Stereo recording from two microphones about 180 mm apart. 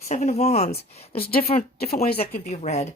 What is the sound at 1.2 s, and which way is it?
Speech, 55° left (ahead or behind).